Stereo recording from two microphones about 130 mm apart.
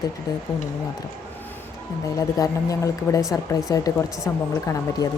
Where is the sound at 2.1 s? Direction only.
25° left (ahead or behind).